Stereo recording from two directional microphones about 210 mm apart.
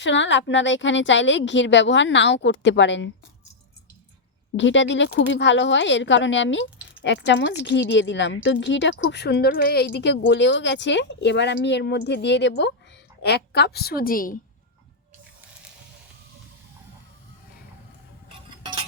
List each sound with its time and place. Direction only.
0.0 s a woman's voice: 60° left (ahead or behind)
4.5 s a woman's voice: 60° left (ahead or behind); by 14.3 s 40° left (ahead or behind)